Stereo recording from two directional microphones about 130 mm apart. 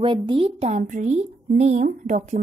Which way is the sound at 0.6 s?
55° right (ahead or behind).